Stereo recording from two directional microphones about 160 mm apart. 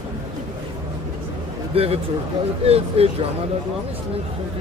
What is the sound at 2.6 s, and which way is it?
Speech, 40° right (ahead or behind).